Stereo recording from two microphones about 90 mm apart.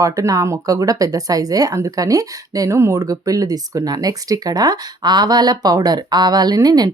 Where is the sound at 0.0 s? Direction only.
40° right (ahead or behind).